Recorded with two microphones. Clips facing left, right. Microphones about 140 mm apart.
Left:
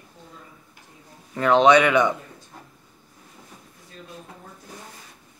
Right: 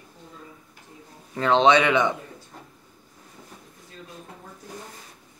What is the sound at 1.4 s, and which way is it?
Speech, 25° right (ahead or behind).